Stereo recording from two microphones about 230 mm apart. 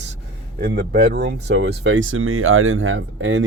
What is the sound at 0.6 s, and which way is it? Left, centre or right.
Speech, right.